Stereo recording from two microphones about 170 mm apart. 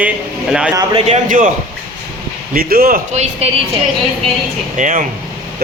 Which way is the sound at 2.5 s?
60° right (ahead or behind).